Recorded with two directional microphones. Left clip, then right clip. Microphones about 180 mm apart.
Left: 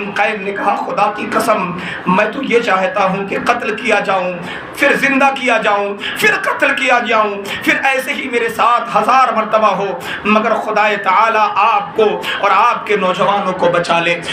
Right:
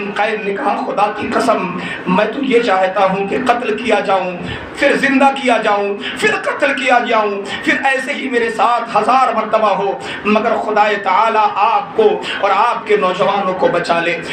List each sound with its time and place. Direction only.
2.1 s a man's voice: 15° left (ahead or behind)